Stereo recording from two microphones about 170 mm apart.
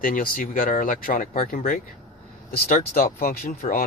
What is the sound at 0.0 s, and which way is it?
Speech, 55° left (ahead or behind).